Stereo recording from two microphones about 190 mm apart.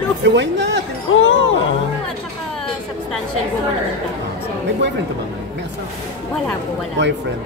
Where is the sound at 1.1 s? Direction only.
85° left.